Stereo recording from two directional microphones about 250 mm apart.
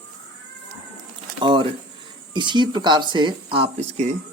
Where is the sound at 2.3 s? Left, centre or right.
Centre.